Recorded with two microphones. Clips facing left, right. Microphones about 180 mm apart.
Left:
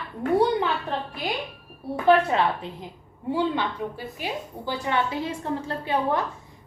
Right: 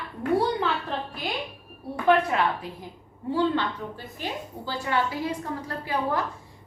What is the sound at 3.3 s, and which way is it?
A woman's voice, 15° left (ahead or behind).